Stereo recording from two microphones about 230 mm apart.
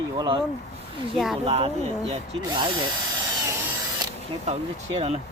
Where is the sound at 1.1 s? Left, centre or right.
Centre.